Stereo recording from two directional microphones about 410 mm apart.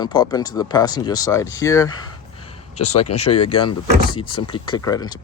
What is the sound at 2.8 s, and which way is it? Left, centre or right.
Speech, left.